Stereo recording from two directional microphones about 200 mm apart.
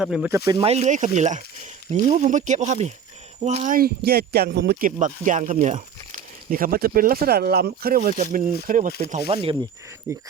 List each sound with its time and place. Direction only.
0.0 s speech: 5° right (ahead or behind)
0.3 s speech: 15° right (ahead or behind)
0.6 s speech: 35° right (ahead or behind)
10.1 s speech: 15° right (ahead or behind)